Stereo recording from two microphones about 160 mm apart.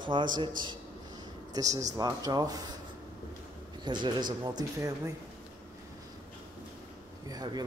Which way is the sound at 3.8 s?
25° right (ahead or behind).